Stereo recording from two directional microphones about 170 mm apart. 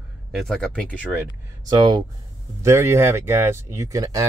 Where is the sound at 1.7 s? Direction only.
25° right (ahead or behind).